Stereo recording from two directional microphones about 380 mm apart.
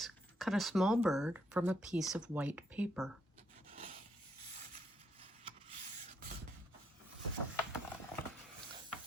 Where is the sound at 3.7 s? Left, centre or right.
Right.